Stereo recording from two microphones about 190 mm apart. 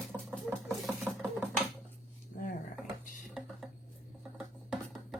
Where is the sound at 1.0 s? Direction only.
Centre (ahead or behind).